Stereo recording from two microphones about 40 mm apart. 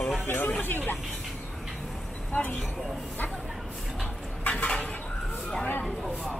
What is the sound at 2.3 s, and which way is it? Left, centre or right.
Speech, left.